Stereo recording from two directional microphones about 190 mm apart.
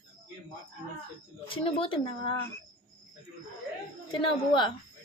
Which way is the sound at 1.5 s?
30° left (ahead or behind).